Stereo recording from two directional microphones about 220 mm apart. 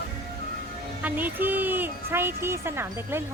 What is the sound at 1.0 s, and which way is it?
Speech, 10° right (ahead or behind).